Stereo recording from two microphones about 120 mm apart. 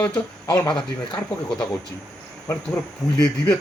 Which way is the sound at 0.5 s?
30° left (ahead or behind).